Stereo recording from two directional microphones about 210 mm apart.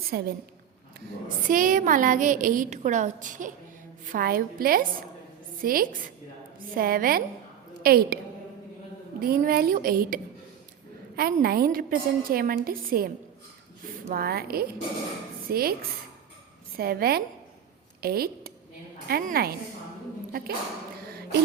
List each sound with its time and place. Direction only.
0.1 s a woman's voice: 45° right (ahead or behind)
1.5 s a woman's voice: 40° right (ahead or behind)
9.2 s a woman's voice: 45° right (ahead or behind)
11.2 s a woman's voice: 45° right (ahead or behind)
16.7 s a woman's voice: 45° right (ahead or behind)